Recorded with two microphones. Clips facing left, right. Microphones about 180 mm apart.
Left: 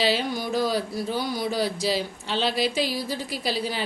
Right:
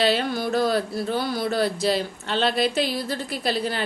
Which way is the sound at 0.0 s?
55° right (ahead or behind).